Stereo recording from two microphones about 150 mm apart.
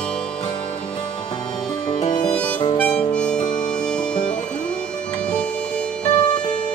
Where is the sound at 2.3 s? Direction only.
5° left (ahead or behind).